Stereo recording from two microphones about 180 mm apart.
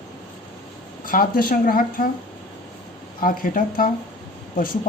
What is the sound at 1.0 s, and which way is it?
A woman's voice, 50° left (ahead or behind).